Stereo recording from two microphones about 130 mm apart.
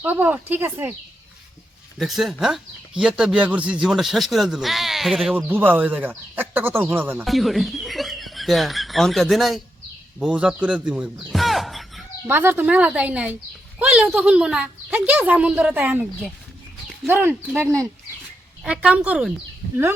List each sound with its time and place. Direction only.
0.0 s speech: 15° right (ahead or behind)
2.0 s speech: centre (ahead or behind)
5.3 s speech: 15° right (ahead or behind)
7.3 s speech: centre (ahead or behind)
12.3 s speech: 15° right (ahead or behind)
18.6 s speech: 10° right (ahead or behind)